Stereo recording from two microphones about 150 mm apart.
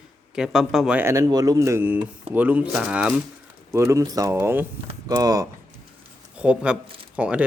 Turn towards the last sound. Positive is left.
turn(degrees=-10)  # may be behind; listen again after turning